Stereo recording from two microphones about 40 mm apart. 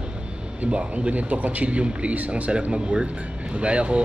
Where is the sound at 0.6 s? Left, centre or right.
Right.